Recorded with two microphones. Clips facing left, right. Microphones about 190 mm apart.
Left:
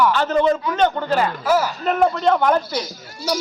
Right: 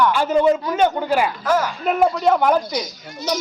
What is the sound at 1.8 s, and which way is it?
Speech, 5° right (ahead or behind).